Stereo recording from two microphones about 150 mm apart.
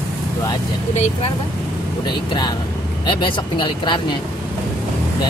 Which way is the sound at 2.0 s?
30° left (ahead or behind).